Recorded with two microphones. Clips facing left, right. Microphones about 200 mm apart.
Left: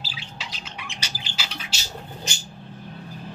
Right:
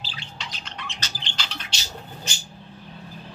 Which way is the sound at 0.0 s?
5° left (ahead or behind).